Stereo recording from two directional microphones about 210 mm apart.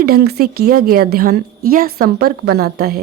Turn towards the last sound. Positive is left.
turn(degrees=-50)  # may be behind; listen again after turning